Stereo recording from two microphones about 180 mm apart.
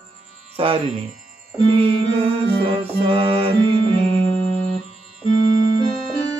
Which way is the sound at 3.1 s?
30° right (ahead or behind).